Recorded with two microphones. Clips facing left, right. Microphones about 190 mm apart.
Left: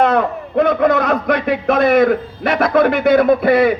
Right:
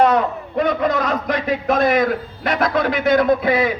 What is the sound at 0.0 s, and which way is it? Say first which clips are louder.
A man's voice: left 1 dB; 60° left (ahead or behind).